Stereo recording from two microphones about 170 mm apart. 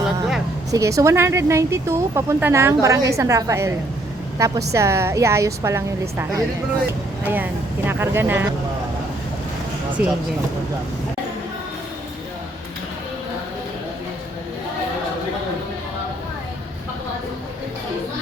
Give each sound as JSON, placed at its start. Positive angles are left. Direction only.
{"t": 0.7, "sound": "a woman's voice", "side_deg": -20}
{"t": 10.0, "sound": "speech", "side_deg": -10}